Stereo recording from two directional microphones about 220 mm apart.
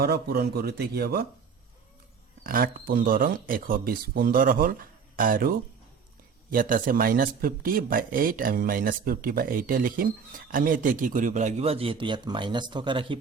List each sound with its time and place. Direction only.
0.0 s speech: 45° right (ahead or behind)
2.4 s speech: 40° right (ahead or behind); by 13.1 s 20° right (ahead or behind)